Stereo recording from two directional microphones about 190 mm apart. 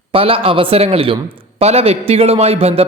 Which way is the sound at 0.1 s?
30° right (ahead or behind).